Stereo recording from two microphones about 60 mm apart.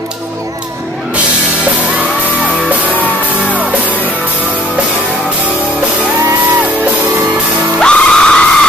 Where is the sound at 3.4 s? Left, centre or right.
Right.